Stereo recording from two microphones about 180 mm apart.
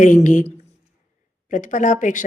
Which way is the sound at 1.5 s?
45° left (ahead or behind).